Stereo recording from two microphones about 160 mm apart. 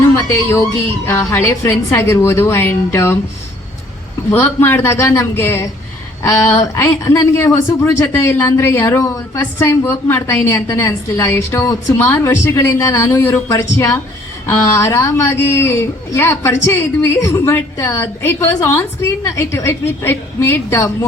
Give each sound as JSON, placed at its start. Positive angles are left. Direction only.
{"t": 0.2, "sound": "speech", "side_deg": 20}
{"t": 4.3, "sound": "speech", "side_deg": 15}